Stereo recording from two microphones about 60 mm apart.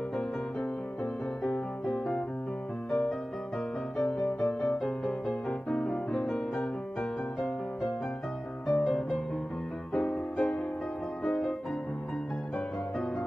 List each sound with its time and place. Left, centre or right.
1.4 s music: centre
4.4 s music: left
8.7 s music: left
11.2 s music: centre